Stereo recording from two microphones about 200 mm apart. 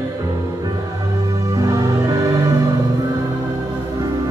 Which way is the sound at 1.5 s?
15° right (ahead or behind).